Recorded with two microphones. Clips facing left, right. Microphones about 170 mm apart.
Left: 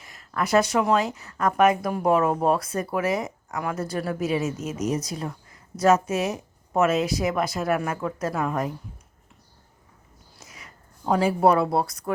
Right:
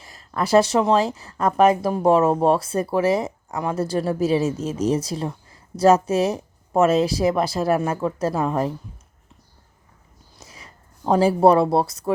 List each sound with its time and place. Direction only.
0.0 s speech: 30° right (ahead or behind)
10.4 s speech: 30° right (ahead or behind)